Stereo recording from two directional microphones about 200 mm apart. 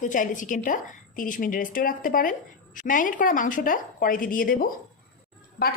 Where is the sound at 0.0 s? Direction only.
40° left (ahead or behind).